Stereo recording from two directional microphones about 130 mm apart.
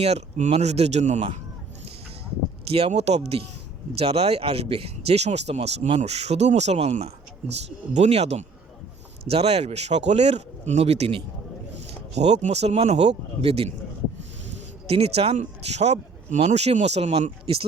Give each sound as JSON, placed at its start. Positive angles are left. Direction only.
{"t": 0.0, "sound": "speech", "side_deg": -60}
{"t": 2.6, "sound": "speech", "side_deg": -50}
{"t": 7.9, "sound": "speech", "side_deg": -55}
{"t": 14.8, "sound": "speech", "side_deg": -50}